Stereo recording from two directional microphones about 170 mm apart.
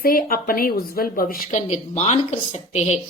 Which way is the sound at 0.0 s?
60° left (ahead or behind).